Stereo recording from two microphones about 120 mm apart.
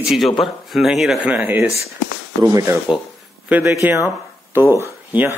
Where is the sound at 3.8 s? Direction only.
15° right (ahead or behind).